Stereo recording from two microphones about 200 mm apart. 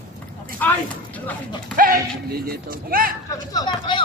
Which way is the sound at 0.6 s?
10° left (ahead or behind).